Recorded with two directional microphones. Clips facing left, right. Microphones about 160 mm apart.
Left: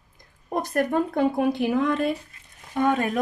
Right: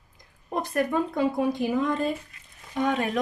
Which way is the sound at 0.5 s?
45° left (ahead or behind).